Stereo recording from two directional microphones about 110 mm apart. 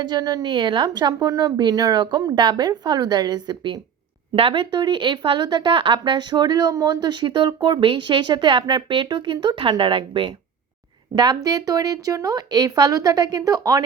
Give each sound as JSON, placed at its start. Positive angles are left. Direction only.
{"t": 0.0, "sound": "a woman's voice", "side_deg": -40}
{"t": 4.4, "sound": "a woman's voice", "side_deg": -50}